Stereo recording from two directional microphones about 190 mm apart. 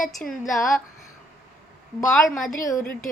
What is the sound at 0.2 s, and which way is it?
Speech, centre (ahead or behind).